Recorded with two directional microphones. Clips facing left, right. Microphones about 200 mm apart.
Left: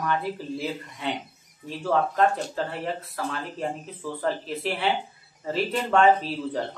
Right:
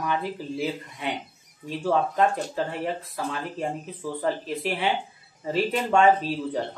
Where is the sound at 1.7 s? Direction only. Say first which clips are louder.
Right 1 dB; 15° right (ahead or behind).